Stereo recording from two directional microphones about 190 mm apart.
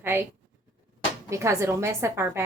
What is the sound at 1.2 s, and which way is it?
A woman's voice, 15° right (ahead or behind).